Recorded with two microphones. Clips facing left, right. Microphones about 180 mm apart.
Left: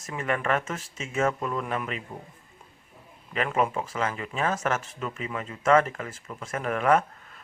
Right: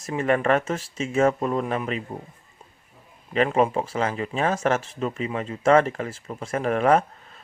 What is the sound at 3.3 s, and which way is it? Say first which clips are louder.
Speech: right 6 dB; 30° right (ahead or behind).